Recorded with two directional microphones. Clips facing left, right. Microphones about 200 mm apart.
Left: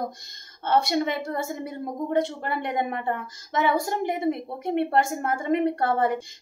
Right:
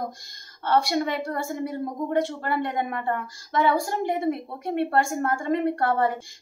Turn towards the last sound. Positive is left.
turn(degrees=20)  # may be behind; listen again after turning